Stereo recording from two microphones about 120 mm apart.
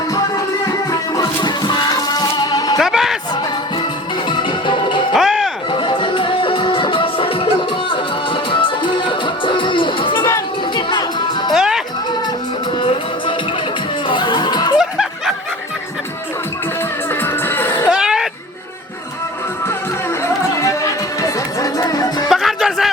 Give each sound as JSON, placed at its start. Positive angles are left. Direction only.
{"t": 0.1, "sound": "music", "side_deg": 30}
{"t": 2.8, "sound": "a sound", "side_deg": -5}
{"t": 4.3, "sound": "music", "side_deg": 45}
{"t": 5.1, "sound": "music", "side_deg": 0}
{"t": 5.7, "sound": "music", "side_deg": 45}
{"t": 11.5, "sound": "music", "side_deg": -5}
{"t": 12.7, "sound": "music", "side_deg": 45}
{"t": 14.1, "sound": "a sound", "side_deg": 40}
{"t": 14.8, "sound": "snicker", "side_deg": -5}
{"t": 17.1, "sound": "music", "side_deg": 20}
{"t": 17.9, "sound": "a sound", "side_deg": -5}
{"t": 20.2, "sound": "music", "side_deg": 25}
{"t": 22.3, "sound": "music", "side_deg": 0}